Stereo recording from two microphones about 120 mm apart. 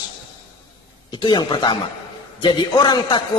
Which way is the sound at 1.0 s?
40° left (ahead or behind).